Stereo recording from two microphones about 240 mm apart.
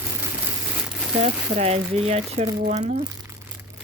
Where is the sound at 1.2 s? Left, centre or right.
Right.